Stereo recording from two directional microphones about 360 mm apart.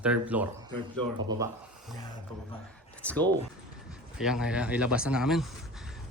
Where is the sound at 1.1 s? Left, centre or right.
Right.